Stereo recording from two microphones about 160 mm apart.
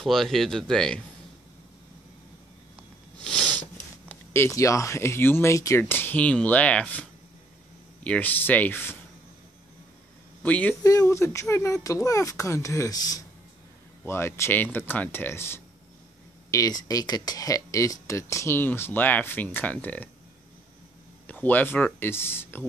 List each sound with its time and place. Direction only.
0.0 s speech: centre (ahead or behind)
3.3 s sniff: 5° left (ahead or behind)
4.1 s speech: 15° left (ahead or behind)
10.4 s speech: 10° left (ahead or behind)
10.8 s speech: 20° left (ahead or behind)
21.3 s speech: 10° left (ahead or behind)